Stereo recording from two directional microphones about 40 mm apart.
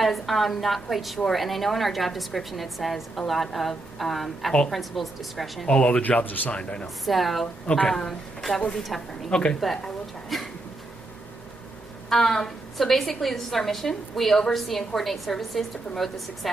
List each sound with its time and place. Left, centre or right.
0.0 s a woman's voice: centre
5.7 s speech: left
6.0 s speech: left
6.5 s speech: left
7.1 s a woman's voice: centre
7.6 s speech: left
8.1 s a woman's voice: centre
9.3 s speech: left
10.3 s a sound: centre
12.1 s a woman's voice: centre